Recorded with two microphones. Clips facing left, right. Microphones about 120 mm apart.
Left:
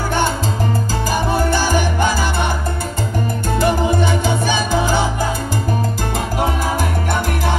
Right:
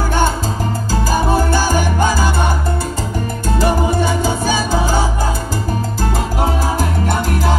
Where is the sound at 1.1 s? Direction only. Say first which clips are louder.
Right 2 dB; 45° right (ahead or behind).